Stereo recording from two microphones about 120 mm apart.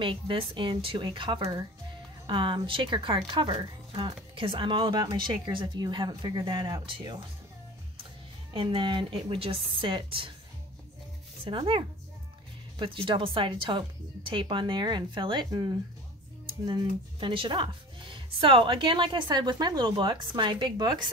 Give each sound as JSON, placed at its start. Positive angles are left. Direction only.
{"t": 0.0, "sound": "speech", "side_deg": -45}
{"t": 8.5, "sound": "speech", "side_deg": -40}
{"t": 11.4, "sound": "speech", "side_deg": -50}